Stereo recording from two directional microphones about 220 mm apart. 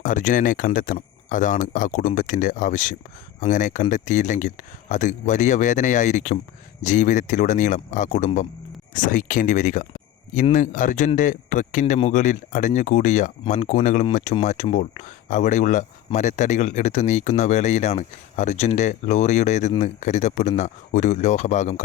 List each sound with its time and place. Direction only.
0.0 s a man's voice: 35° left (ahead or behind)